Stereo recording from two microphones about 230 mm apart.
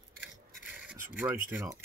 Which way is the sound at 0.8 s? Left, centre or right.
Centre.